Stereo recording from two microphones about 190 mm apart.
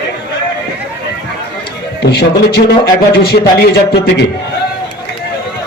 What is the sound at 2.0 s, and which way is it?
A man's voice, 60° left (ahead or behind).